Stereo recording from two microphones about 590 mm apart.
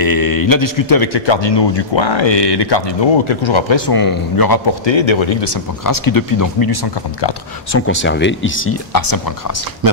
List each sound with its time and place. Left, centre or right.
0.0 s a man's voice: left
7.7 s speech: centre
8.9 s speech: left